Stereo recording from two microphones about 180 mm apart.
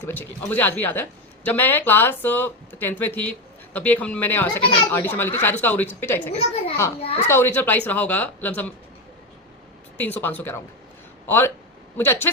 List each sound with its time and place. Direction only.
0.0 s speech: 10° left (ahead or behind)
7.0 s speech: 35° left (ahead or behind)
7.3 s speech: 10° left (ahead or behind)
10.0 s speech: 10° left (ahead or behind)